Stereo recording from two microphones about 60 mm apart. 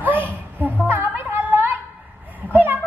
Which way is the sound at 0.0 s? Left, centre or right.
Right.